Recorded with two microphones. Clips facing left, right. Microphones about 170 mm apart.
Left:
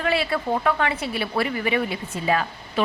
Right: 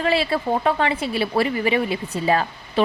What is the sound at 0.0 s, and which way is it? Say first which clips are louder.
Speech: right 3 dB; 25° right (ahead or behind).